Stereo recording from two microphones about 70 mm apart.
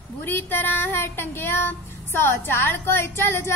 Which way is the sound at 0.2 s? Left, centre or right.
Left.